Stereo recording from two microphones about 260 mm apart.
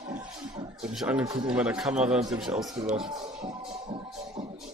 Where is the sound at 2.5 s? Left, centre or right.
Right.